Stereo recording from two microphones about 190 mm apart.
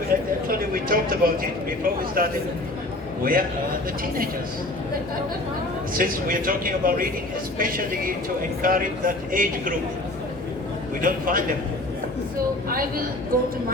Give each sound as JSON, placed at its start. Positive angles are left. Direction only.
{"t": 0.1, "sound": "a man's voice", "side_deg": -50}
{"t": 5.9, "sound": "a man's voice", "side_deg": -50}
{"t": 11.0, "sound": "a man's voice", "side_deg": -45}